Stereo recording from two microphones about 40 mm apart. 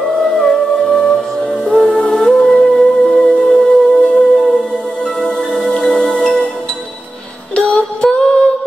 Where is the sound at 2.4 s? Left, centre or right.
Left.